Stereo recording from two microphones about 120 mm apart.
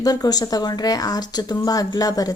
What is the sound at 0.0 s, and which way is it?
A woman's voice, 35° left (ahead or behind).